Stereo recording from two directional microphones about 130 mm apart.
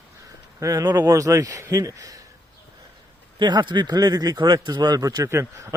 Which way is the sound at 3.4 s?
35° right (ahead or behind).